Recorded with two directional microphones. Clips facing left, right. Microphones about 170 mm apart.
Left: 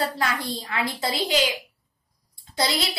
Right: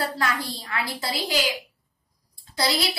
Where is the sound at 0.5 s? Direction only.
20° left (ahead or behind).